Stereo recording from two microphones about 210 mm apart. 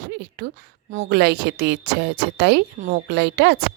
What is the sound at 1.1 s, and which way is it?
A woman's voice, 50° right (ahead or behind).